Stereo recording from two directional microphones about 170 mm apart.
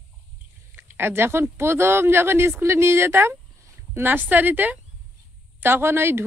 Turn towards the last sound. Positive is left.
turn(degrees=-15)  # may be behind; listen again after turning